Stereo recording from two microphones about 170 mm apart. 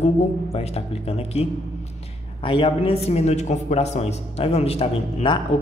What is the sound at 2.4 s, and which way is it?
A man's voice, 30° left (ahead or behind).